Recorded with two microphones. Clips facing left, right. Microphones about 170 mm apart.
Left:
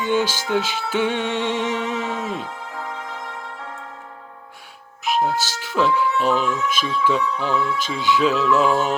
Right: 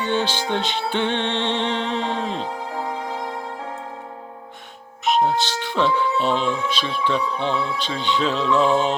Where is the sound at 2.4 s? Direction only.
30° right (ahead or behind).